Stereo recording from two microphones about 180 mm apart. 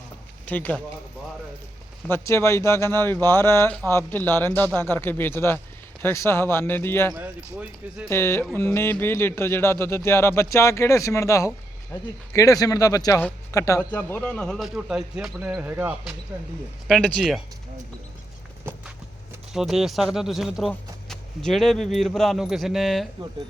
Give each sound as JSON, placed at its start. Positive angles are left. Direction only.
{"t": 0.4, "sound": "speech", "side_deg": 10}
{"t": 2.0, "sound": "speech", "side_deg": 15}
{"t": 7.1, "sound": "speech", "side_deg": -10}
{"t": 8.1, "sound": "speech", "side_deg": 15}
{"t": 19.5, "sound": "speech", "side_deg": 0}